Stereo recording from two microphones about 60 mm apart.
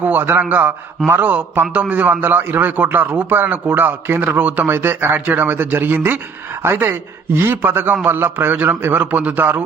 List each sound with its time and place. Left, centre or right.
0.0 s a man's voice: right
7.3 s a man's voice: right